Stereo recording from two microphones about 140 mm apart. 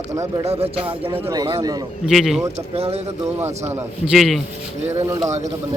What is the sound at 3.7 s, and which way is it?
Speech, 15° right (ahead or behind).